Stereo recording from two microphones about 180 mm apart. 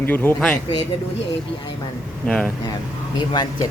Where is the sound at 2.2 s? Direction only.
5° left (ahead or behind).